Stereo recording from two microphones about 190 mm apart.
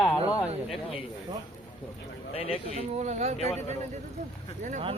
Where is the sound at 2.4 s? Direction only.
30° left (ahead or behind).